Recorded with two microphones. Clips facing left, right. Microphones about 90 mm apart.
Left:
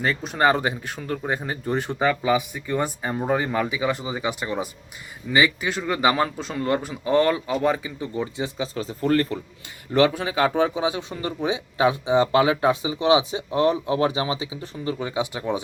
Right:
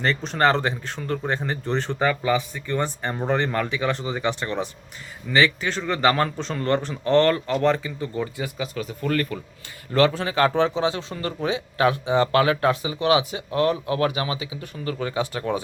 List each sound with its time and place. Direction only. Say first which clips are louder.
0.0 s speech: even; 5° left (ahead or behind); by 9.4 s 30° left (ahead or behind)
10.1 s speech: right 1 dB; 10° left (ahead or behind)